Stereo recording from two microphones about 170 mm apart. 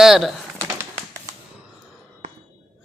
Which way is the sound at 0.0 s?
Centre (ahead or behind).